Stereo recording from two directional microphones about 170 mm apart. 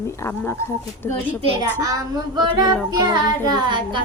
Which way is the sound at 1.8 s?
20° right (ahead or behind).